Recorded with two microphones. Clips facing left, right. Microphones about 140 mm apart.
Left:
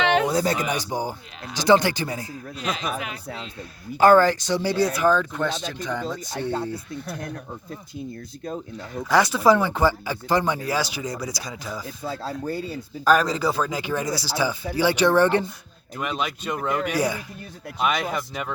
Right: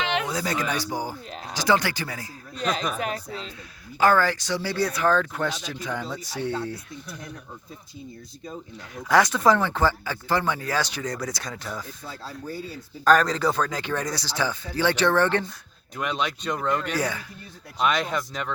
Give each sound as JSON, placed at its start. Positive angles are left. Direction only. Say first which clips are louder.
{"t": 0.1, "sound": "a sound", "louder": "left 6 dB", "side_deg": 35}
{"t": 0.6, "sound": "speech", "louder": "left 2 dB", "side_deg": 20}
{"t": 4.0, "sound": "speech", "louder": "left 5 dB", "side_deg": 25}
{"t": 5.3, "sound": "speech", "louder": "left 2 dB", "side_deg": -10}
{"t": 7.1, "sound": "speech", "louder": "left 6 dB", "side_deg": 55}
{"t": 9.0, "sound": "speech", "louder": "left 1 dB", "side_deg": 0}
{"t": 12.0, "sound": "speech", "louder": "left 7 dB", "side_deg": 70}
{"t": 13.1, "sound": "speech", "louder": "even", "side_deg": 5}